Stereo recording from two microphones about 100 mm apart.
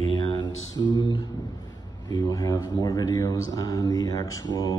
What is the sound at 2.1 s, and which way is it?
Speech, 35° left (ahead or behind).